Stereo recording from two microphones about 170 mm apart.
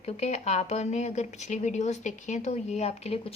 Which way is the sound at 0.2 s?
40° left (ahead or behind).